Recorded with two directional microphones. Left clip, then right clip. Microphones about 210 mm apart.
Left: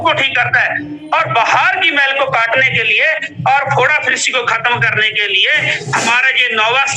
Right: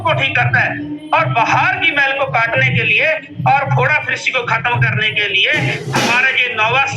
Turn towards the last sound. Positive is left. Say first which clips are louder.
# left 2 dB
turn(degrees=45)  # may be behind; listen again after turning